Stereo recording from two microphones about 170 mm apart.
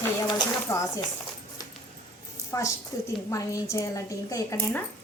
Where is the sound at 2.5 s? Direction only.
20° left (ahead or behind).